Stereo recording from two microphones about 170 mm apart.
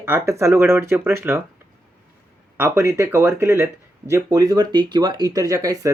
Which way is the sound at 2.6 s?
15° right (ahead or behind).